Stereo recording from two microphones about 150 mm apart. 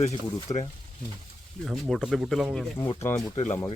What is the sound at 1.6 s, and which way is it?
Speech, centre (ahead or behind).